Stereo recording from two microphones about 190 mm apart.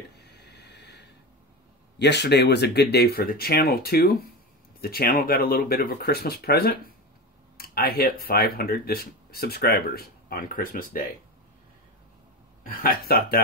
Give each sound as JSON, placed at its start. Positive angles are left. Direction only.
{"t": 0.2, "sound": "a sound", "side_deg": 60}
{"t": 2.0, "sound": "speech", "side_deg": 65}
{"t": 12.6, "sound": "speech", "side_deg": 50}